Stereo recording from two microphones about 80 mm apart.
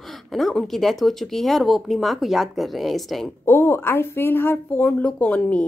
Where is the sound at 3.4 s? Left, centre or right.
Left.